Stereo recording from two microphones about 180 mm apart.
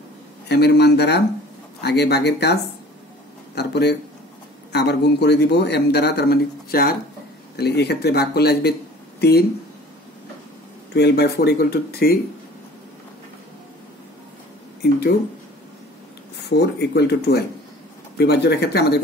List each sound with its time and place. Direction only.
0.5 s a man's voice: 65° left (ahead or behind)
10.9 s a man's voice: 65° left (ahead or behind)
14.8 s speech: 65° left (ahead or behind)
16.4 s a man's voice: 65° left (ahead or behind)